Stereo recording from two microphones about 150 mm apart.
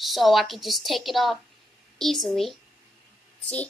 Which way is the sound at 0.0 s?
Centre (ahead or behind).